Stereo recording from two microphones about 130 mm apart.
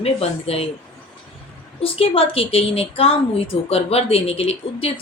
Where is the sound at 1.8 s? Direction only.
45° left (ahead or behind).